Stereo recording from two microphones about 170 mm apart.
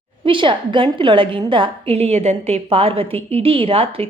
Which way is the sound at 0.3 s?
30° right (ahead or behind).